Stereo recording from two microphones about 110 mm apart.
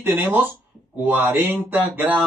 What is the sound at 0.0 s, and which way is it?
A man's voice, 15° right (ahead or behind).